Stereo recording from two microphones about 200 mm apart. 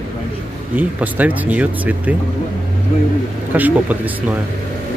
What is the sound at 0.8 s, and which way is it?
Speech, 10° right (ahead or behind).